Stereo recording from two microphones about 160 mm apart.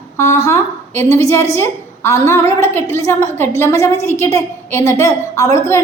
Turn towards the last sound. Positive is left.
turn(degrees=20)  # may be behind; listen again after turning